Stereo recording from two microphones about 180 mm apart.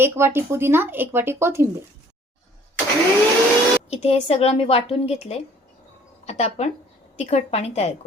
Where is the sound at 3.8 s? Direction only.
35° left (ahead or behind).